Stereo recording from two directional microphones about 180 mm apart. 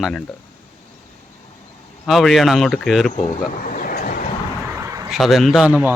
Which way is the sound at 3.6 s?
50° left (ahead or behind).